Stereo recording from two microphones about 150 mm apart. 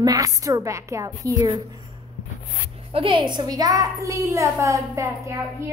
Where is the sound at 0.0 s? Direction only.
25° right (ahead or behind).